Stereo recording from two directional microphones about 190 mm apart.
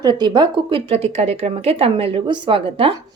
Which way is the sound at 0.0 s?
20° right (ahead or behind).